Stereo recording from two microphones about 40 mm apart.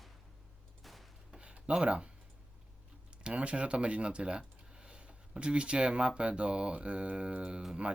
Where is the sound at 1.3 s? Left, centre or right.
Right.